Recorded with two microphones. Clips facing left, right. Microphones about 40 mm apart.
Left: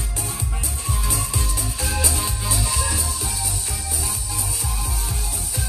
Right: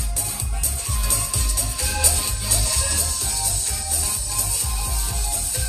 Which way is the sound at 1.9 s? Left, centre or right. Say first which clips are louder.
Left 1 dB; centre.